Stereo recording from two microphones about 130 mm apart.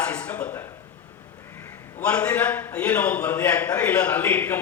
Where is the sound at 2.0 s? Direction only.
10° left (ahead or behind).